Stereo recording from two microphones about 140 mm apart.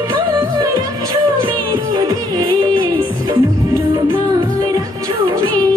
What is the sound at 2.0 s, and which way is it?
Music, 25° right (ahead or behind).